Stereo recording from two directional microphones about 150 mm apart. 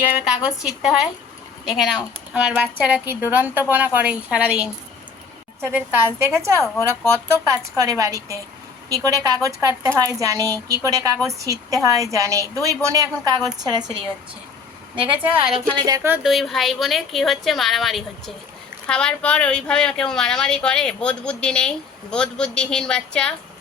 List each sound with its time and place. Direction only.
0.3 s a woman's voice: 5° right (ahead or behind)
6.6 s a woman's voice: 20° left (ahead or behind)
7.3 s a woman's voice: 20° right (ahead or behind)
15.5 s speech: 30° right (ahead or behind)
16.0 s a woman's voice: 5° right (ahead or behind)